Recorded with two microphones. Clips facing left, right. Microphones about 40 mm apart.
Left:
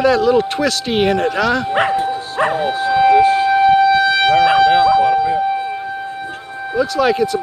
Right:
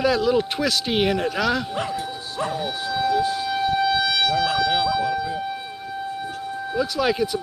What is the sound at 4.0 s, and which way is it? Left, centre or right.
Siren, left.